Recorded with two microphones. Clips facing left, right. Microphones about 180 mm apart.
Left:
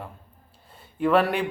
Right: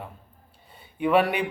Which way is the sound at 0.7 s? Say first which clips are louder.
Left 1 dB; centre (ahead or behind).